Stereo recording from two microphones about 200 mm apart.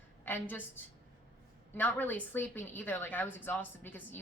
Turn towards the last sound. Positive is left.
turn(degrees=10)  # may be behind; listen again after turning